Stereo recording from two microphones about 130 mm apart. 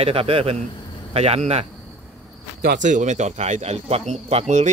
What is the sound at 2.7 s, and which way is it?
Speech, 75° right (ahead or behind).